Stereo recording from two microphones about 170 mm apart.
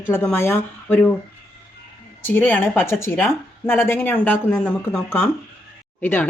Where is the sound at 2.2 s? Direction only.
10° left (ahead or behind).